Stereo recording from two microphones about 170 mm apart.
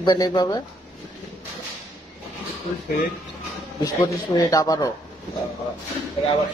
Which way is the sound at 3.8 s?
20° left (ahead or behind).